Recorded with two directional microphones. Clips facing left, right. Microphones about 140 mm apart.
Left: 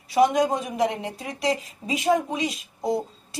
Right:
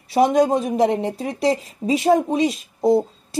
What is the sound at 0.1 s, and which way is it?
Speech, 30° right (ahead or behind).